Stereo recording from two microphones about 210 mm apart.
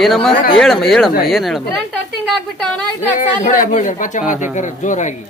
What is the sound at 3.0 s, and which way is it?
Speech, 35° left (ahead or behind).